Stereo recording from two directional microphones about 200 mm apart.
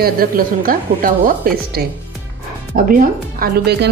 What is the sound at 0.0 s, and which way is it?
A woman's voice, 45° right (ahead or behind).